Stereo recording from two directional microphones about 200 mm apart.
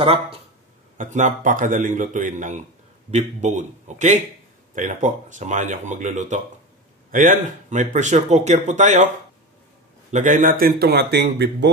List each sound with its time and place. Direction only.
0.0 s speech: 30° right (ahead or behind)
0.9 s speech: 40° right (ahead or behind)
10.1 s speech: 40° right (ahead or behind); by 11.7 s 55° right (ahead or behind)